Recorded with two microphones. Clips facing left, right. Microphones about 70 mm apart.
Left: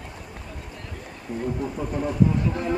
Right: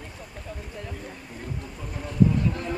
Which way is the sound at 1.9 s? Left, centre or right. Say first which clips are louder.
Even; centre.